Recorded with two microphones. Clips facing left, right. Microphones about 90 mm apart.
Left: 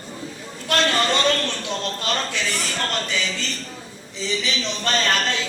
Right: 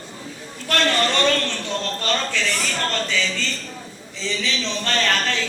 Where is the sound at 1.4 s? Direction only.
15° left (ahead or behind).